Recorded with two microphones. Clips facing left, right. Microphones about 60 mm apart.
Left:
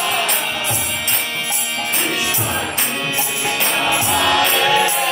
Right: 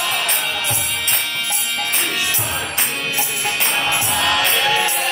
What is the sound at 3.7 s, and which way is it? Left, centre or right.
Music, centre.